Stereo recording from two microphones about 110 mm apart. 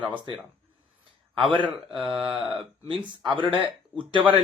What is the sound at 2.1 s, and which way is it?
Speech, 5° right (ahead or behind).